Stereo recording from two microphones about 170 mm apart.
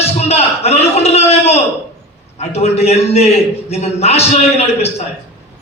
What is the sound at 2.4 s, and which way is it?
A man's voice, 40° left (ahead or behind).